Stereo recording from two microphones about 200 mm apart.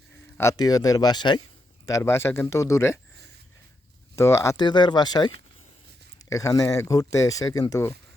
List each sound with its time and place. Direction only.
0.3 s speech: 15° left (ahead or behind)
4.1 s speech: 15° left (ahead or behind)